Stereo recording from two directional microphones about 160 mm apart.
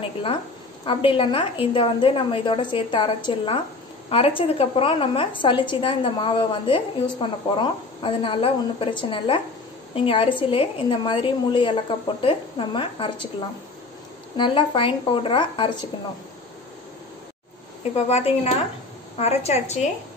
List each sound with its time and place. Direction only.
0.8 s a woman's voice: 35° left (ahead or behind)
14.3 s a woman's voice: 30° left (ahead or behind)
18.0 s a woman's voice: 40° left (ahead or behind)